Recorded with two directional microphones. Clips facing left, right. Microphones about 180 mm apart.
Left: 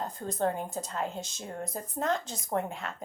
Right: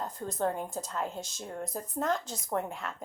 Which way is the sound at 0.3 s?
25° left (ahead or behind).